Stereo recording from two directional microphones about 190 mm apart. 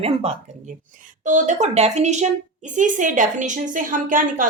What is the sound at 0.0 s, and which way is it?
Speech, 35° right (ahead or behind).